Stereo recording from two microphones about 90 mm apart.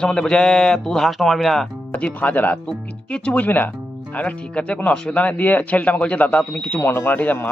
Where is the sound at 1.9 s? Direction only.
15° left (ahead or behind).